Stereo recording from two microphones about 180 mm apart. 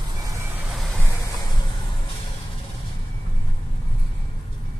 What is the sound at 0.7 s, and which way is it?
Vehicle, centre (ahead or behind).